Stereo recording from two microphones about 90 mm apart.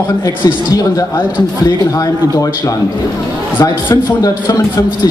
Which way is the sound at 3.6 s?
40° left (ahead or behind).